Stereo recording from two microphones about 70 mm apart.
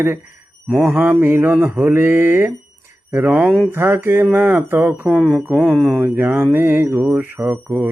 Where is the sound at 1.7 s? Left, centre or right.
Right.